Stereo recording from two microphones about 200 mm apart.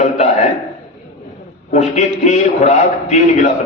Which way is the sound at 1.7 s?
35° left (ahead or behind).